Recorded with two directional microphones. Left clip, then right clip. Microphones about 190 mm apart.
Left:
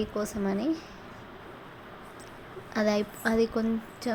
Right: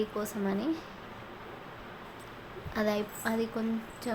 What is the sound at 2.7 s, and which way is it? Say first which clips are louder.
A woman's voice: left 4 dB; 20° left (ahead or behind).